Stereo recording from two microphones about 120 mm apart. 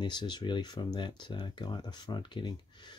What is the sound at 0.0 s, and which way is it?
Speech, 40° left (ahead or behind).